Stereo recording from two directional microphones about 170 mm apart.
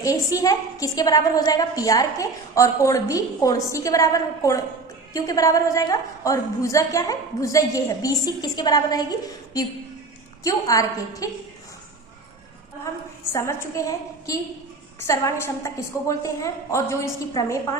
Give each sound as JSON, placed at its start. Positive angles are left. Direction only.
{"t": 0.0, "sound": "a woman's voice", "side_deg": 20}
{"t": 13.3, "sound": "a woman's voice", "side_deg": 15}